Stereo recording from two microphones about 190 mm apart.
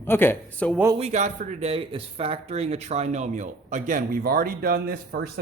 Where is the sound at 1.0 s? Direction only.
40° right (ahead or behind).